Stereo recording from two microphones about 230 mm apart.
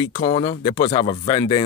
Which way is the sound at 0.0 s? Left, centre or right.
Left.